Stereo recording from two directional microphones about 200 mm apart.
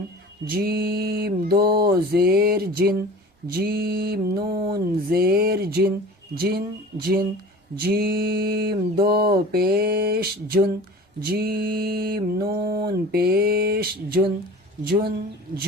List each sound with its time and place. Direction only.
0.5 s mantra: 50° right (ahead or behind)